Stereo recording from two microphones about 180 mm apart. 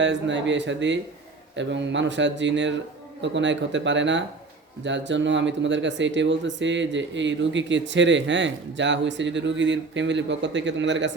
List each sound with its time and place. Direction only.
0.0 s speech: 85° right